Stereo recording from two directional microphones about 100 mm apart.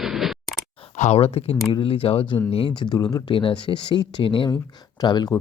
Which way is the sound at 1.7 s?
60° left (ahead or behind).